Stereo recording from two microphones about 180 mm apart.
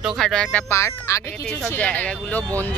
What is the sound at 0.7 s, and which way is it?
Speech, 15° left (ahead or behind).